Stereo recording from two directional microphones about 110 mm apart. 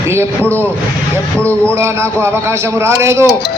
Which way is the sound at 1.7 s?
25° right (ahead or behind).